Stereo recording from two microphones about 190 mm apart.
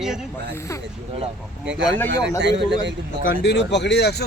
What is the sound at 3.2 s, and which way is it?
Speech, 55° left (ahead or behind).